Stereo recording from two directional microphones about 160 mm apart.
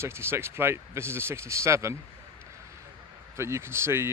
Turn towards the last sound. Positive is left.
turn(degrees=-15)  # may be behind; listen again after turning